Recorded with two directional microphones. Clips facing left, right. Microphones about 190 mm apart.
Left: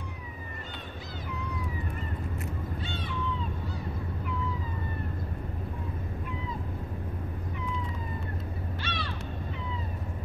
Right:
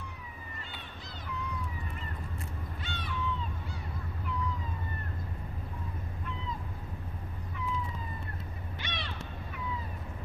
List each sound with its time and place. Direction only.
8.8 s crow: 20° right (ahead or behind)